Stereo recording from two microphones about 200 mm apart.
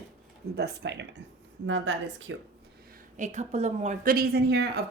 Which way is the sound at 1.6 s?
70° right (ahead or behind).